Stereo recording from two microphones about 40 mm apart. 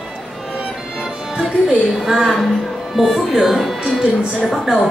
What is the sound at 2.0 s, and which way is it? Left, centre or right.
Speech, centre.